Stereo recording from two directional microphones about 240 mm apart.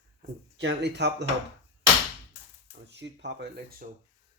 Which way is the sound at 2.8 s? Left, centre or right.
Right.